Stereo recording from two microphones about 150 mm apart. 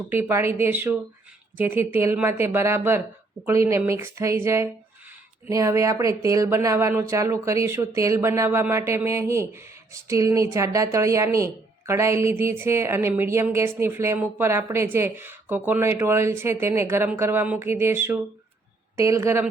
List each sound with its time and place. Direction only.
0.1 s speech: 15° right (ahead or behind)